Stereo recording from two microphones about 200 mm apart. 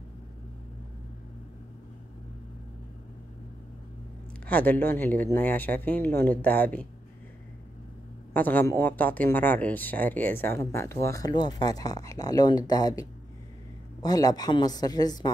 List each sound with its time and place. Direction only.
4.5 s speech: 10° left (ahead or behind)
8.3 s speech: 10° left (ahead or behind)
14.0 s a woman's voice: 20° left (ahead or behind)